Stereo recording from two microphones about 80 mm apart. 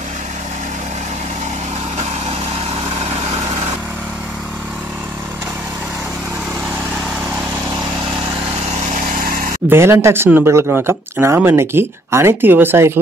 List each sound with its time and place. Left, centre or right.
9.7 s speech: right